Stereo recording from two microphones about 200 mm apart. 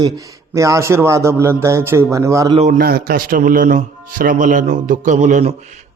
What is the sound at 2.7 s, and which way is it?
A man's voice, 50° right (ahead or behind).